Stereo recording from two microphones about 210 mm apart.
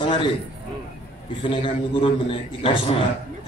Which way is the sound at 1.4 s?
25° left (ahead or behind).